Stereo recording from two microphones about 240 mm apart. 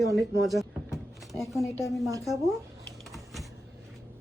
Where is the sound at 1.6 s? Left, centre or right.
Centre.